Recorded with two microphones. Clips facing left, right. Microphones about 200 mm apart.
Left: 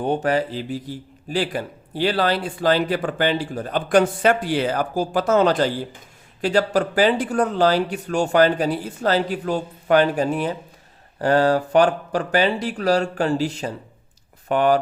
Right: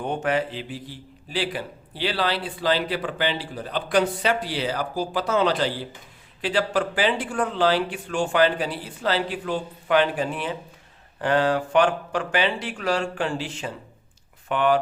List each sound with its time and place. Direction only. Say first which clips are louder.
0.0 s a man's voice: left 4 dB; 35° left (ahead or behind)